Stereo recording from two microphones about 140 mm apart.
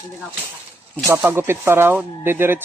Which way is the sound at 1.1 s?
15° right (ahead or behind).